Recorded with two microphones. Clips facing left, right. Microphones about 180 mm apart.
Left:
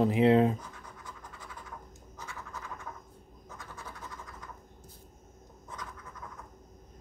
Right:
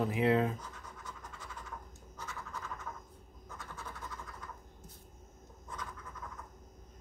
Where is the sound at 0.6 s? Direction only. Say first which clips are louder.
Left 1 dB; 10° left (ahead or behind).